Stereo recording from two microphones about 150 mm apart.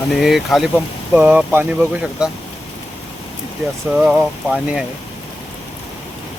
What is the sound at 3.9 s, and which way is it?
Speech, 5° right (ahead or behind).